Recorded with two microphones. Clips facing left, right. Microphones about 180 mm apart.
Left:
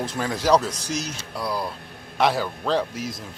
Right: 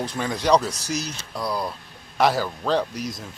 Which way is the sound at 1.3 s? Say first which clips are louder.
Right 1 dB; 5° left (ahead or behind).